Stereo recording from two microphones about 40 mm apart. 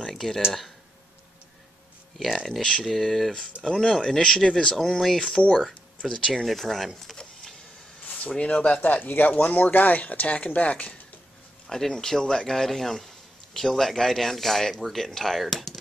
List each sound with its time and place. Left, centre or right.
0.0 s a sound: centre
2.1 s a man's voice: centre
6.3 s speech: centre
8.4 s speech: left
8.8 s speech: left
11.9 s a man's voice: centre